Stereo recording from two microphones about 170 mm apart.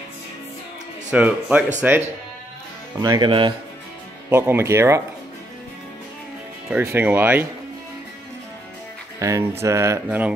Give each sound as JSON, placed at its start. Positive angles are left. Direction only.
{"t": 1.1, "sound": "mantra", "side_deg": -10}
{"t": 3.0, "sound": "speech", "side_deg": -25}
{"t": 4.3, "sound": "mantra", "side_deg": -15}
{"t": 6.8, "sound": "mantra", "side_deg": -10}
{"t": 9.2, "sound": "mantra", "side_deg": -15}